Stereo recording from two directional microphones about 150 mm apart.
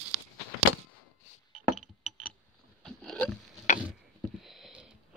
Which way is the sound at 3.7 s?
55° left (ahead or behind).